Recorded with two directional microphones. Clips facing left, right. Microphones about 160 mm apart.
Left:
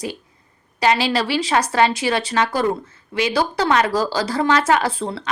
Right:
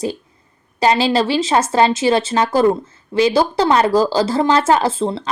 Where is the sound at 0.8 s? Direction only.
30° right (ahead or behind).